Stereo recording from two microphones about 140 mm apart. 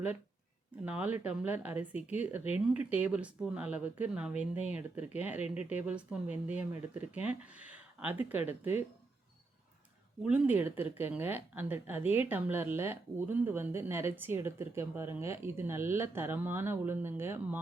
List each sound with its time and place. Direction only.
0.9 s speech: 10° right (ahead or behind)
10.2 s speech: 10° right (ahead or behind)